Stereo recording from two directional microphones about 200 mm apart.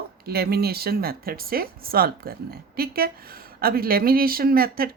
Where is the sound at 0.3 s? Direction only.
50° right (ahead or behind).